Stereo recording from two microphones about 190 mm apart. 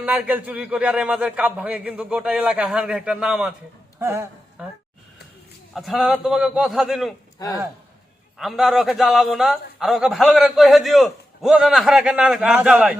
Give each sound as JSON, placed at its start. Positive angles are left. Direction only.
{"t": 0.0, "sound": "a man's voice", "side_deg": -5}
{"t": 7.3, "sound": "speech", "side_deg": 20}
{"t": 8.4, "sound": "a man's voice", "side_deg": 0}